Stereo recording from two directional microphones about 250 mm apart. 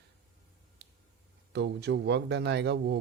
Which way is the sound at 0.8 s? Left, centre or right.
Right.